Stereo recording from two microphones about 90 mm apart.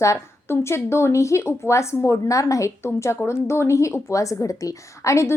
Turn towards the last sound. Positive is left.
turn(degrees=35)  # may be behind; listen again after turning